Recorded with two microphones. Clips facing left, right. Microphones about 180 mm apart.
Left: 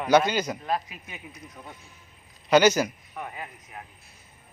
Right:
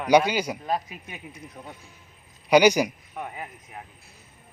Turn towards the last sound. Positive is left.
turn(degrees=-15)  # may be behind; listen again after turning